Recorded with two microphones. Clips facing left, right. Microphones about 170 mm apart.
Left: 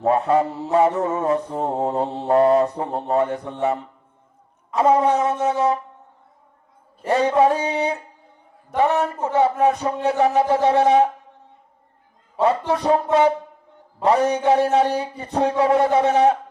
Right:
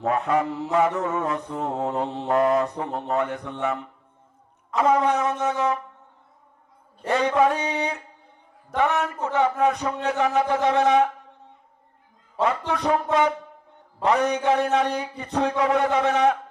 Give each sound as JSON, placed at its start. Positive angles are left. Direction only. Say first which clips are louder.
{"t": 0.0, "sound": "mantra", "louder": "left 5 dB", "side_deg": 30}
{"t": 7.1, "sound": "mantra", "louder": "left 3 dB", "side_deg": 30}
{"t": 12.4, "sound": "mantra", "louder": "left 4 dB", "side_deg": 30}